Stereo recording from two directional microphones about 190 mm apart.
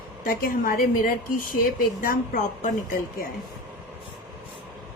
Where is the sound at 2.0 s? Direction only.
50° left (ahead or behind).